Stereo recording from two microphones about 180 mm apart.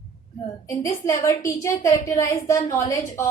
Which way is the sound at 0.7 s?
15° left (ahead or behind).